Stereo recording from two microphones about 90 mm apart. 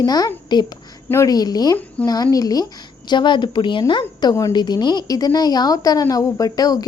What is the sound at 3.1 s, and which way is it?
A woman's voice, 60° left (ahead or behind).